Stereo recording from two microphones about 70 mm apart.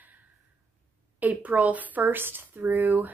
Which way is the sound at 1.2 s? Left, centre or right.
Right.